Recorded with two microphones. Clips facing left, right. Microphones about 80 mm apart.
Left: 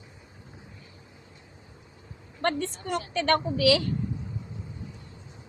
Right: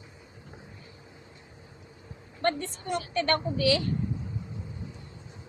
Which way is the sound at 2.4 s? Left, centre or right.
Left.